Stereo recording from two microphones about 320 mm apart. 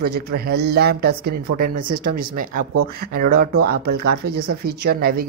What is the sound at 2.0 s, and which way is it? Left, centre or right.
Speech, right.